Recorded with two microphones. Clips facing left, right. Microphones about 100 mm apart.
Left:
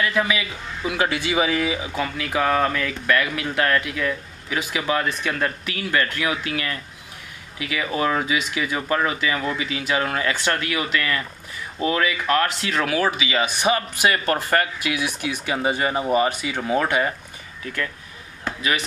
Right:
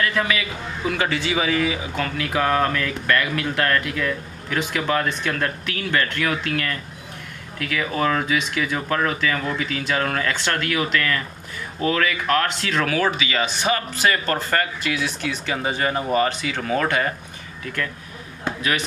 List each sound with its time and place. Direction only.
0.0 s a man's voice: 5° left (ahead or behind)
2.1 s a man's voice: centre (ahead or behind)
18.6 s speech: centre (ahead or behind)